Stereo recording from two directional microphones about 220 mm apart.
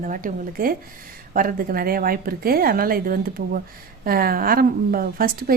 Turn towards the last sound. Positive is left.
turn(degrees=-40)  # may be behind; listen again after turning